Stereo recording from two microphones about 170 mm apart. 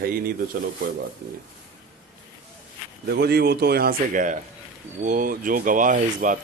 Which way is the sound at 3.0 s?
70° right (ahead or behind).